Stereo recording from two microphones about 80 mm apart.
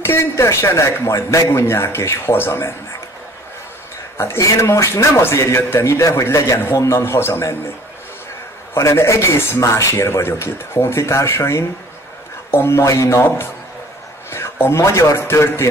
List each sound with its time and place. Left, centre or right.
0.0 s speech: left
4.2 s speech: left
8.7 s speech: left
14.3 s speech: left